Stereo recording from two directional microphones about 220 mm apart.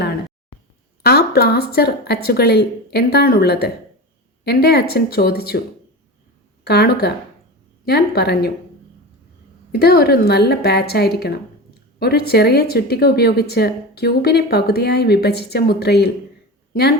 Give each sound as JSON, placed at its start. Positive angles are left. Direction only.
{"t": 1.0, "sound": "speech", "side_deg": 45}
{"t": 6.7, "sound": "speech", "side_deg": 45}
{"t": 9.7, "sound": "speech", "side_deg": 45}